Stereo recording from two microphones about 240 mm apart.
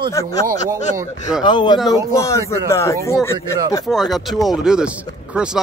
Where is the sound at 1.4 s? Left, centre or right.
Centre.